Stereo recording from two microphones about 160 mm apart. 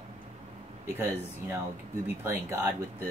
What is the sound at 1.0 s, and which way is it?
Speech, 15° right (ahead or behind).